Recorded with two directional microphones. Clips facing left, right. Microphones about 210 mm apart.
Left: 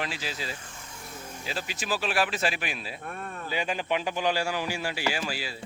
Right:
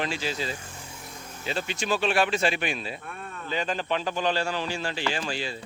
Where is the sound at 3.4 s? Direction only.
10° left (ahead or behind).